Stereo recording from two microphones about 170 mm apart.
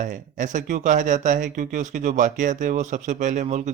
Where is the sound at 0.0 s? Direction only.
50° right (ahead or behind).